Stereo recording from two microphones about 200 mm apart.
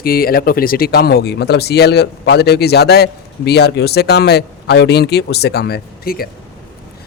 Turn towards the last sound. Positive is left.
turn(degrees=50)  # may be behind; listen again after turning